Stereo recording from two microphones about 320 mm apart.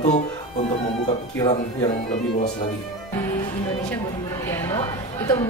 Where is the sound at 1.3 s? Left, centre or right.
Centre.